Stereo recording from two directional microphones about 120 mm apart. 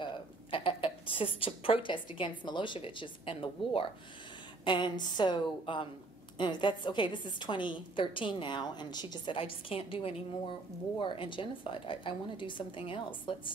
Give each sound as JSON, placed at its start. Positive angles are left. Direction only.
{"t": 0.0, "sound": "speech", "side_deg": 45}
{"t": 4.6, "sound": "a woman's voice", "side_deg": 40}